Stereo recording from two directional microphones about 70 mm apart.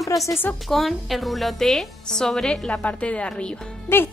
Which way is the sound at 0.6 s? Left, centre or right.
Centre.